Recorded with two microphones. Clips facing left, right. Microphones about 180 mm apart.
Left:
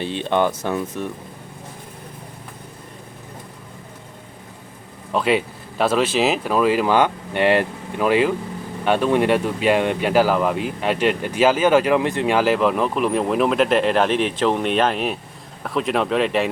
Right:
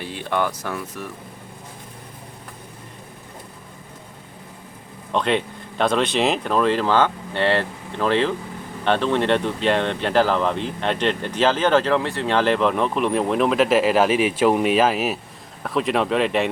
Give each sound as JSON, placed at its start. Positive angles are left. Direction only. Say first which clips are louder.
{"t": 0.0, "sound": "speech", "louder": "left 4 dB", "side_deg": 25}
{"t": 5.1, "sound": "speech", "louder": "left 2 dB", "side_deg": 5}